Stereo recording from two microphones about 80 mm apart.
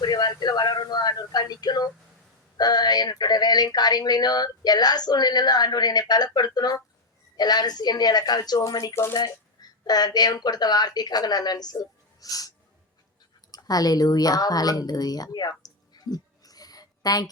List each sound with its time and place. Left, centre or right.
0.0 s speech: left
8.5 s speech: left
9.1 s speech: left
13.5 s speech: left